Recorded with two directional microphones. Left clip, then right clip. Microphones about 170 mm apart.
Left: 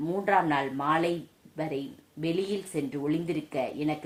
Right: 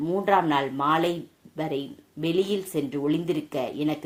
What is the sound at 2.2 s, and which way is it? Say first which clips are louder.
Speech: right 5 dB; 30° right (ahead or behind).